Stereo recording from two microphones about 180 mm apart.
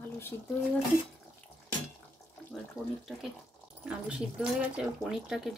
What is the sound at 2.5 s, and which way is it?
Speech, centre (ahead or behind).